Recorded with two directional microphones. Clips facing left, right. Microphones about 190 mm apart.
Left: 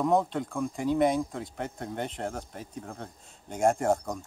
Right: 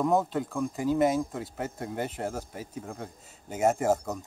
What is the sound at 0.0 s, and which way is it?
Speech, centre (ahead or behind).